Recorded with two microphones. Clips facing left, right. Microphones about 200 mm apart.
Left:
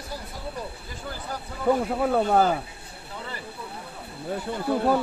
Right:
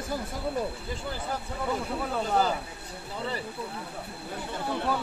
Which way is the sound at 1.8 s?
55° left (ahead or behind).